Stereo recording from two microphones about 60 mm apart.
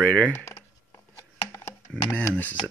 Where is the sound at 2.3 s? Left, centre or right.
Left.